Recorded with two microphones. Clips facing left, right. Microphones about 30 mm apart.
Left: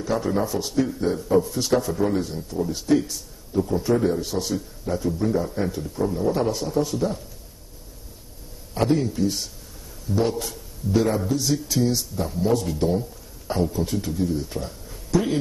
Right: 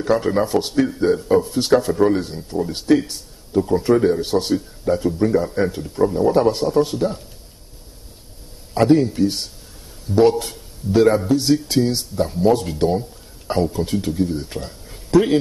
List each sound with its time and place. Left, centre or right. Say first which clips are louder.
0.0 s a man's voice: right 6 dB; right
2.0 s a man's voice: right 6 dB; right
2.2 s a man's voice: right 3 dB; right
3.5 s a man's voice: right 5 dB; right
4.2 s a man's voice: right 7 dB; right
6.1 s a man's voice: right 7 dB; right
6.5 s a man's voice: right 6 dB; right
8.7 s a man's voice: right 7 dB; right